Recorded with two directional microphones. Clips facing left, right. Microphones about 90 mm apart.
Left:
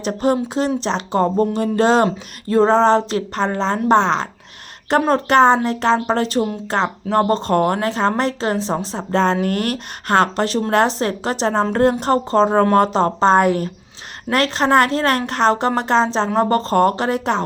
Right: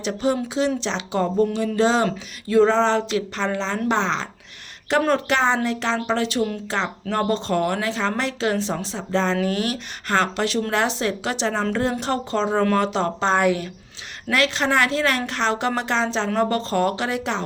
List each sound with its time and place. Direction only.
0.0 s a woman's voice: 45° left (ahead or behind)
2.5 s a woman's voice: 40° left (ahead or behind)
4.9 s a woman's voice: 40° left (ahead or behind)
8.9 s a woman's voice: 50° left (ahead or behind)